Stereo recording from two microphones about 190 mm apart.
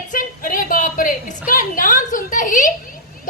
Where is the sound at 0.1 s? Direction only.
45° left (ahead or behind).